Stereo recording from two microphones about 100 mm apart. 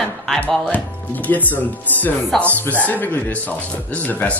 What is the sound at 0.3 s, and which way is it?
Speech, 10° left (ahead or behind).